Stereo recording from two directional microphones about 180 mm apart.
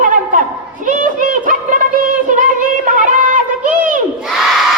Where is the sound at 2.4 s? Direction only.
45° right (ahead or behind).